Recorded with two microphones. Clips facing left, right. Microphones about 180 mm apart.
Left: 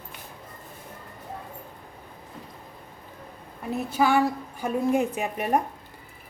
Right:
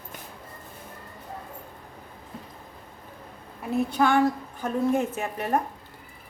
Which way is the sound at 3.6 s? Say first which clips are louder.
Right 1 dB; centre (ahead or behind).